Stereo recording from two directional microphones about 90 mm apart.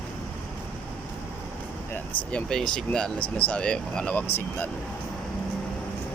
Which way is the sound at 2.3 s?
5° left (ahead or behind).